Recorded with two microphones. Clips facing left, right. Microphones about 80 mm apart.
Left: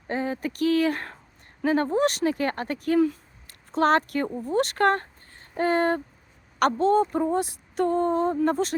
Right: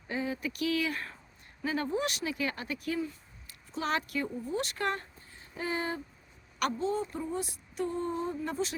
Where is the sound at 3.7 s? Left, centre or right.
Left.